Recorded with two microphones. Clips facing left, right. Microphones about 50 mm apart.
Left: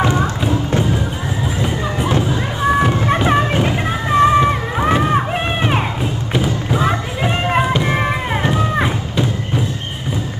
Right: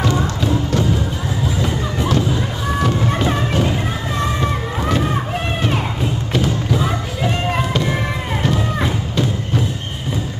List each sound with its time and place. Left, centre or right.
0.0 s music: left
6.3 s music: left